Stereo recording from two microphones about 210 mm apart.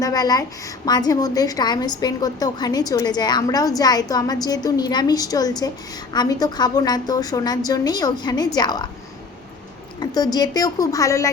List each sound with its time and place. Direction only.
0.0 s a woman's voice: 20° left (ahead or behind)
10.0 s a woman's voice: 20° left (ahead or behind)